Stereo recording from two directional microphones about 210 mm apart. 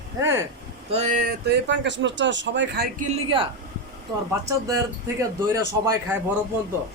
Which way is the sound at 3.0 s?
25° right (ahead or behind).